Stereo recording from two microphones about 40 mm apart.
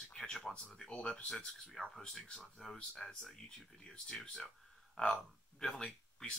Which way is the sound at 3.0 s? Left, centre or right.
Left.